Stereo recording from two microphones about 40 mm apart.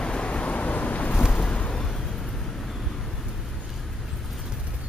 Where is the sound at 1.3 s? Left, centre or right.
Left.